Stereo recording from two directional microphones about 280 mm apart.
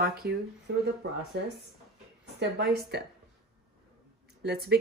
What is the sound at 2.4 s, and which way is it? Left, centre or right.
Speech, right.